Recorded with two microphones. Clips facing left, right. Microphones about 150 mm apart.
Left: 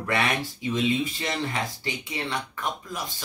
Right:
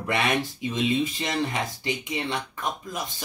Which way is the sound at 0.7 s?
20° right (ahead or behind).